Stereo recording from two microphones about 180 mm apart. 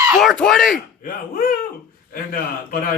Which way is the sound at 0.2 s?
Centre (ahead or behind).